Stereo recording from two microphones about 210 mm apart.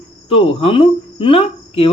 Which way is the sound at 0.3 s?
25° left (ahead or behind).